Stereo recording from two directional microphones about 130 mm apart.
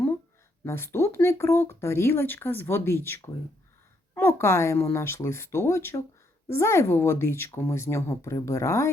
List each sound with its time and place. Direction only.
0.6 s speech: 20° left (ahead or behind)